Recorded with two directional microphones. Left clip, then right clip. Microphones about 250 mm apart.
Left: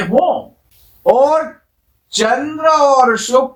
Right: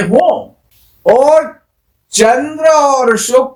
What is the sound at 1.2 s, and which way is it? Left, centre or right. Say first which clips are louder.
A man's voice: right 4 dB; right.